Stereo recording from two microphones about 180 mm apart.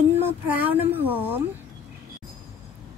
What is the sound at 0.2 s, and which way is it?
Speech, 10° right (ahead or behind).